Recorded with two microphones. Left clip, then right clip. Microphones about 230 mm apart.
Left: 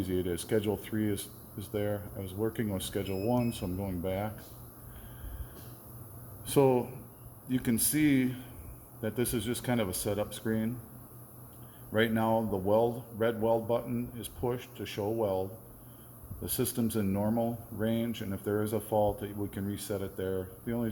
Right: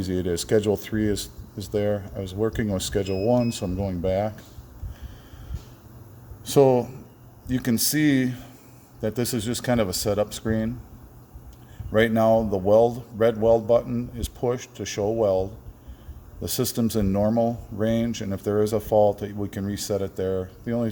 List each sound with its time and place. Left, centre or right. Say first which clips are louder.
0.0 s speech: right 7 dB; right
6.4 s speech: right 8 dB; right
11.9 s speech: right 10 dB; right